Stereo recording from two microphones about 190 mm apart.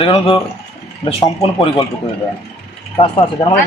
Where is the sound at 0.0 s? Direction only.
30° left (ahead or behind).